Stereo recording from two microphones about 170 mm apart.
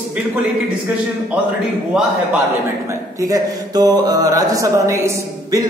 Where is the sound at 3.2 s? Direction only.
20° right (ahead or behind).